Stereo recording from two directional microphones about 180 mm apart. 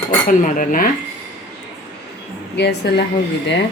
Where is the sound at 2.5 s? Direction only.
70° left (ahead or behind).